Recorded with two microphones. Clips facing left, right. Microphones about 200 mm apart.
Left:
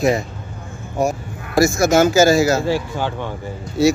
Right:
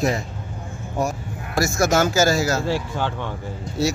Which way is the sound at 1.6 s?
10° left (ahead or behind).